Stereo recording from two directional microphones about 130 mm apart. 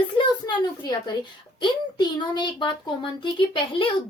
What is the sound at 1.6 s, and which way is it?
A woman's voice, 35° left (ahead or behind).